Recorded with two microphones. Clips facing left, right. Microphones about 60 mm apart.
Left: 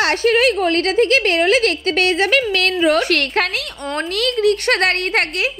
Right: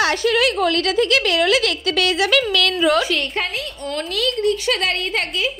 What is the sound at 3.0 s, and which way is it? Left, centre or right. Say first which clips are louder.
Speech: left 4 dB; left.